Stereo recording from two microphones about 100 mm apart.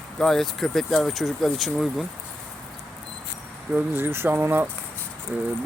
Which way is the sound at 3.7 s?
20° right (ahead or behind).